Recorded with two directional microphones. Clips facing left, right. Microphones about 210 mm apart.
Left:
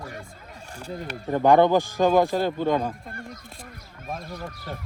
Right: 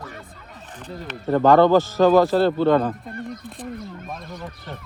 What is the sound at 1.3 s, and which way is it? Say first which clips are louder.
Speech: right 3 dB; 15° left (ahead or behind).